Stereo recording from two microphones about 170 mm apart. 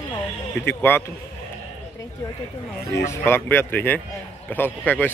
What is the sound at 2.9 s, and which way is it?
Speech, 15° left (ahead or behind).